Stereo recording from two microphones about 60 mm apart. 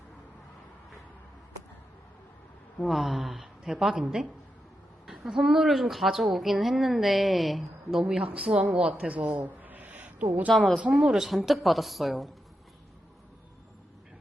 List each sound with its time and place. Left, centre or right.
2.8 s a woman's voice: centre
5.0 s a woman's voice: centre
8.0 s a woman's voice: centre
8.4 s a woman's voice: centre
10.5 s a woman's voice: centre
10.8 s a woman's voice: centre